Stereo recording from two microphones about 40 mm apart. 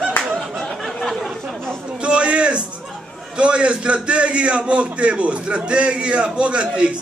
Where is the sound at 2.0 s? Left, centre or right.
Right.